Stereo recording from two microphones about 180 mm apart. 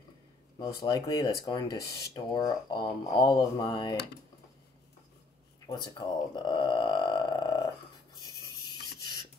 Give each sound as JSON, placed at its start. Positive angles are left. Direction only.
{"t": 0.6, "sound": "speech", "side_deg": 20}
{"t": 5.7, "sound": "speech", "side_deg": 25}